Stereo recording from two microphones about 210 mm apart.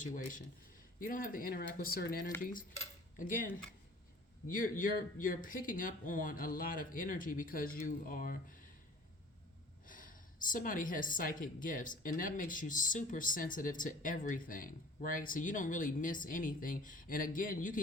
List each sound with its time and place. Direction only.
0.0 s a woman's voice: 40° left (ahead or behind)
4.4 s a woman's voice: 40° left (ahead or behind)
9.8 s a woman's voice: 40° left (ahead or behind)